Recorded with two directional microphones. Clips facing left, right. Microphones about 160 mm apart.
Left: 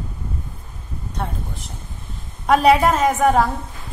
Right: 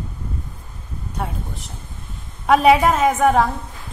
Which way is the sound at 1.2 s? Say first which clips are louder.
Even; centre (ahead or behind).